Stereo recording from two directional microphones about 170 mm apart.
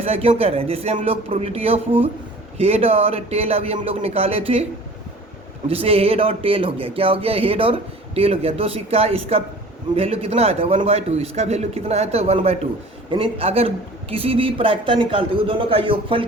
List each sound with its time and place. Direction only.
0.0 s speech: 35° right (ahead or behind)
5.6 s speech: 35° right (ahead or behind)